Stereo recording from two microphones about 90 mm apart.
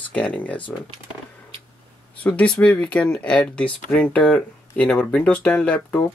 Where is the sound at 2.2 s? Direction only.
15° left (ahead or behind).